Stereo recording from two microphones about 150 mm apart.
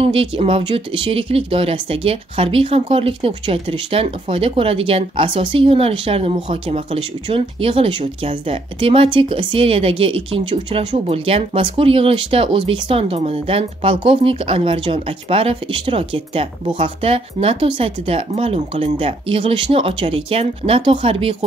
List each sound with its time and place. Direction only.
0.0 s speech: 40° right (ahead or behind)